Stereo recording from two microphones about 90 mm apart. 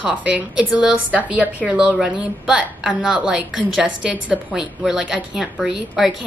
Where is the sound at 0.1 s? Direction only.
15° right (ahead or behind).